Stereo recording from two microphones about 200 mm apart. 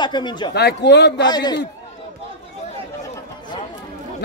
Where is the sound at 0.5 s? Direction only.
55° left (ahead or behind).